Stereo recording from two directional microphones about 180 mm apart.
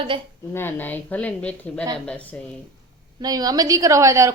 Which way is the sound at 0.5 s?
10° left (ahead or behind).